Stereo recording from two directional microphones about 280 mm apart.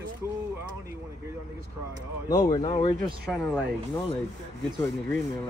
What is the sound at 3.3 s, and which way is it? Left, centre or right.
Speech, centre.